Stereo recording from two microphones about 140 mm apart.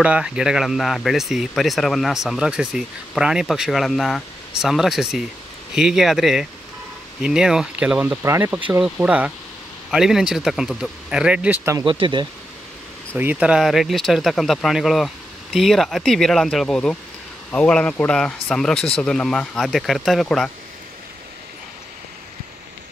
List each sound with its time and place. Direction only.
0.0 s speech: 5° right (ahead or behind)
11.8 s speech: 35° right (ahead or behind)
13.2 s speech: 10° right (ahead or behind)